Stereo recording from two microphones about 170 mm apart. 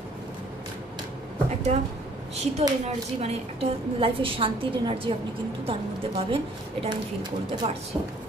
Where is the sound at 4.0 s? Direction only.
30° right (ahead or behind).